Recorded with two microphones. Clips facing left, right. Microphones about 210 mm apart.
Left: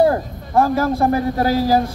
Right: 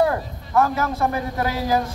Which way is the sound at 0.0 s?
35° left (ahead or behind).